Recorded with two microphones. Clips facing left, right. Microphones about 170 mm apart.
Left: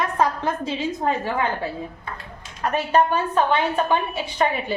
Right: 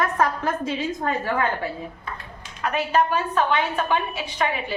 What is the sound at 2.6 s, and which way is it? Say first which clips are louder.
Speech: left 2 dB; 35° left (ahead or behind).